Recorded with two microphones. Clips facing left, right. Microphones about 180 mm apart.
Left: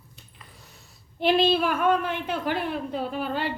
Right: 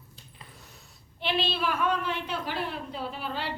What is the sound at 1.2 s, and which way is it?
A woman's voice, 45° left (ahead or behind).